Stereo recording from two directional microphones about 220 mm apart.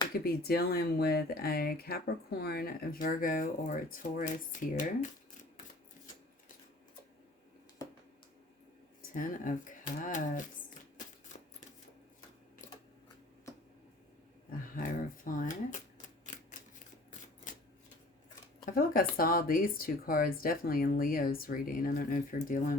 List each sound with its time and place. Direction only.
0.1 s speech: 45° left (ahead or behind)
9.1 s speech: 35° left (ahead or behind)
14.8 s a sound: 40° left (ahead or behind)
16.0 s typewriter: 35° left (ahead or behind)
18.6 s speech: 40° left (ahead or behind)